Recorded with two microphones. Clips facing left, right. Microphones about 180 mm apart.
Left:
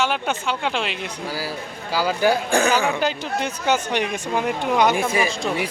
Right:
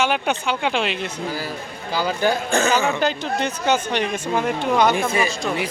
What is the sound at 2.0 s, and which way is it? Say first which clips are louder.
Speech: left 1 dB; 10° left (ahead or behind).